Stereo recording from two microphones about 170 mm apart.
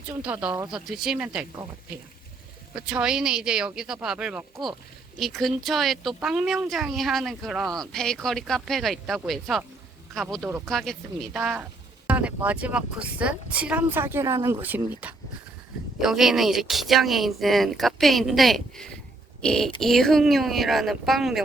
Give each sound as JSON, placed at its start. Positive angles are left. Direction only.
{"t": 0.2, "sound": "speech", "side_deg": -10}
{"t": 0.7, "sound": "speech", "side_deg": -5}
{"t": 2.7, "sound": "speech", "side_deg": -5}